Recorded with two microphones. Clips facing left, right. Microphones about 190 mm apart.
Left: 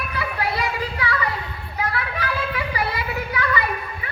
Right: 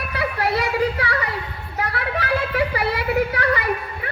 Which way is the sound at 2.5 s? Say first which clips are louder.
Right 4 dB; 65° right (ahead or behind).